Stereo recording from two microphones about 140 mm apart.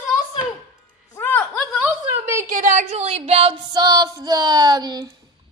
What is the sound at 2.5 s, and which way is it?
A woman's voice, 70° right (ahead or behind).